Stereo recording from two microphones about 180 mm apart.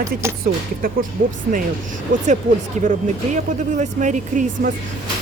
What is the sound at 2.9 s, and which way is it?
Speech, 40° right (ahead or behind).